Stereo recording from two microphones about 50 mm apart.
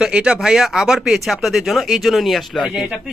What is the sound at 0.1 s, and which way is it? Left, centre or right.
Speech, right.